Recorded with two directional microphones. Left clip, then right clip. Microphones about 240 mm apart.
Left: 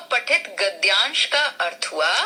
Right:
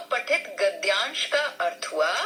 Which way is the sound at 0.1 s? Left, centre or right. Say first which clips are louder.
Left 5 dB; left.